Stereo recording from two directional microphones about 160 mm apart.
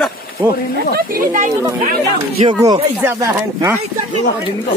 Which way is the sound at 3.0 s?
15° right (ahead or behind).